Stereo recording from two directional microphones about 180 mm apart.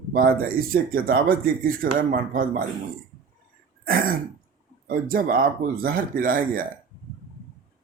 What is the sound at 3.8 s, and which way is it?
Throat clearing, 55° right (ahead or behind).